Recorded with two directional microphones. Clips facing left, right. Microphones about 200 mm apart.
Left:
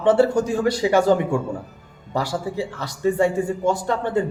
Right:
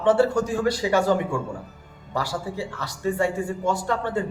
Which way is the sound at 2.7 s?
20° left (ahead or behind).